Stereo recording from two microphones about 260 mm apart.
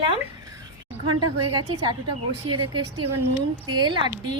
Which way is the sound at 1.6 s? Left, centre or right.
Right.